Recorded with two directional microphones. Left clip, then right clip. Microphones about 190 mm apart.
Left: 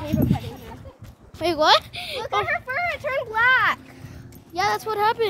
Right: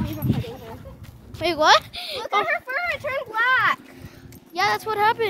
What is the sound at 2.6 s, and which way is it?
Speech, 15° left (ahead or behind).